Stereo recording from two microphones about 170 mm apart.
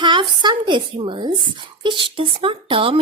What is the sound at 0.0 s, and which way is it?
Speech, 25° right (ahead or behind).